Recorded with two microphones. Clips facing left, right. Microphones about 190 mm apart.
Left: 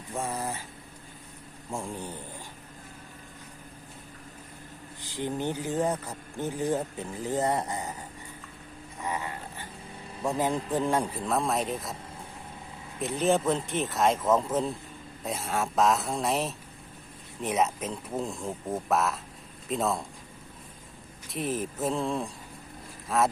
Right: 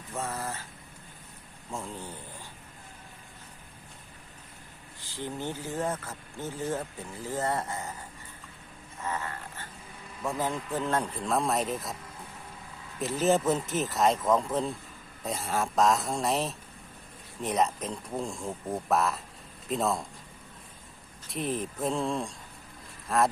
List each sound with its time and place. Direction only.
0.1 s speech: 15° left (ahead or behind)
1.7 s speech: 15° left (ahead or behind)
4.9 s speech: 15° left (ahead or behind)
9.0 s a sound: 15° left (ahead or behind)
10.2 s speech: 15° left (ahead or behind); by 11.9 s centre (ahead or behind)
13.0 s speech: centre (ahead or behind)
21.2 s speech: centre (ahead or behind)